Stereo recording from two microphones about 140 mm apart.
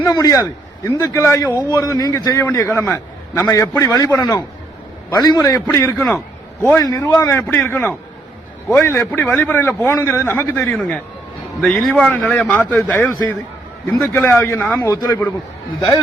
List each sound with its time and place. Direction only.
0.0 s a man's voice: 25° left (ahead or behind)